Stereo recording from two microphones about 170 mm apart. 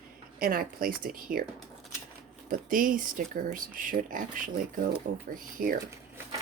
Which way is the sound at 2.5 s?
55° right (ahead or behind).